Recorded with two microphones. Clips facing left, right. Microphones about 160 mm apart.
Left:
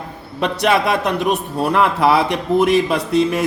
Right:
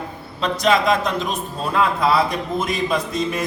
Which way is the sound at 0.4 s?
60° left (ahead or behind).